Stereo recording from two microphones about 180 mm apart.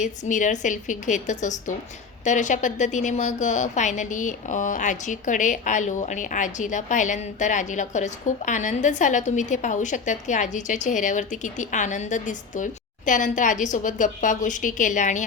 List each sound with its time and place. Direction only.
0.0 s a woman's voice: 45° left (ahead or behind)